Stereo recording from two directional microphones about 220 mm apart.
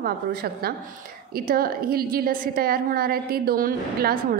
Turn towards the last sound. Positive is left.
turn(degrees=-40)  # may be behind; listen again after turning